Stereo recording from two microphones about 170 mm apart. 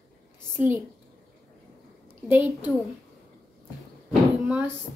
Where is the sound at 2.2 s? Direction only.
10° right (ahead or behind).